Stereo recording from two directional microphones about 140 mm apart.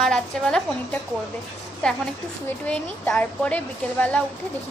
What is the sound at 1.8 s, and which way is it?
A woman's voice, 5° left (ahead or behind).